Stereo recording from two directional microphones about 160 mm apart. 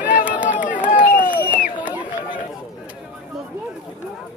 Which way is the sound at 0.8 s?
55° left (ahead or behind).